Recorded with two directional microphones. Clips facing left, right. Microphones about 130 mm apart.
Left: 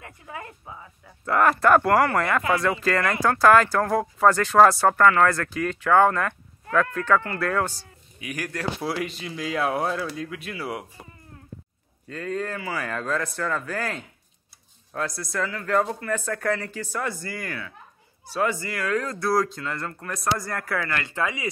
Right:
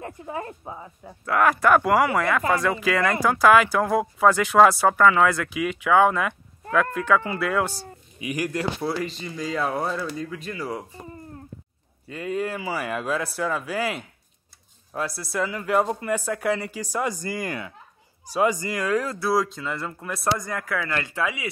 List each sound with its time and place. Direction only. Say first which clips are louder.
0.0 s a sound: right 7 dB; 30° right (ahead or behind)
1.2 s speech: even; 5° right (ahead or behind)
8.8 s speech: right 1 dB; 5° left (ahead or behind)
12.1 s speech: right 2 dB; 10° right (ahead or behind)